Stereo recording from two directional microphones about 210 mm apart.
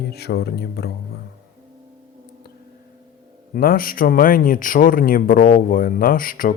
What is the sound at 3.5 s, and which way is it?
Speech, 45° left (ahead or behind).